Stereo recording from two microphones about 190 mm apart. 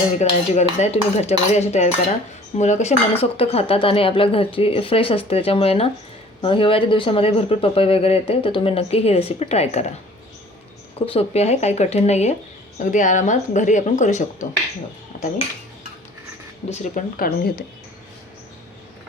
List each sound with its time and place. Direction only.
0.2 s speech: 35° left (ahead or behind)
11.0 s speech: 30° left (ahead or behind)
16.6 s speech: 40° left (ahead or behind)